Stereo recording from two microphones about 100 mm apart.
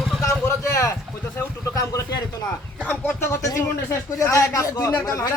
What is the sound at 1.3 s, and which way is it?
Speech, 30° left (ahead or behind).